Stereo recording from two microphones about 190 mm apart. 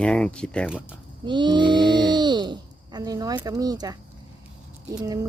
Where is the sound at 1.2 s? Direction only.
25° right (ahead or behind).